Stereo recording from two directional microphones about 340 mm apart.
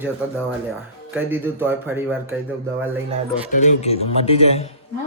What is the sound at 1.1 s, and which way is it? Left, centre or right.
Speech, centre.